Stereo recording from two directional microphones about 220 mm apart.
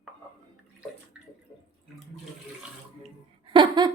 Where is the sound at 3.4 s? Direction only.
20° right (ahead or behind).